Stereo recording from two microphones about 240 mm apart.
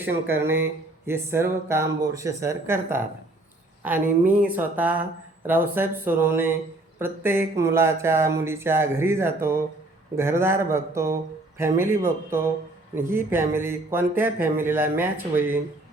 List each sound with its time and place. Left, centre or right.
0.0 s speech: centre